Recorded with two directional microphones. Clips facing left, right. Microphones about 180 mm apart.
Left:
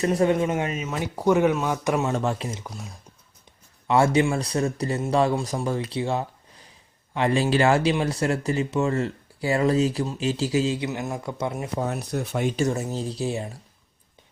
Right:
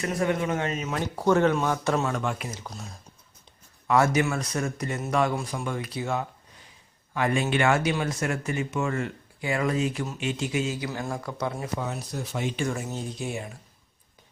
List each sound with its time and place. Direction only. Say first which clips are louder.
0.0 s speech: left 5 dB; 30° left (ahead or behind)
0.6 s speech: left 1 dB; 5° left (ahead or behind)
2.1 s speech: left 4 dB; 30° left (ahead or behind)
2.6 s speech: left 2 dB; 10° left (ahead or behind)
3.8 s speech: left 3 dB; 30° left (ahead or behind)
11.8 s speech: left 5 dB; 60° left (ahead or behind); by 13.6 s 30° left (ahead or behind)